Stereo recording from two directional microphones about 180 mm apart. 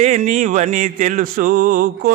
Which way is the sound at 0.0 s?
45° right (ahead or behind).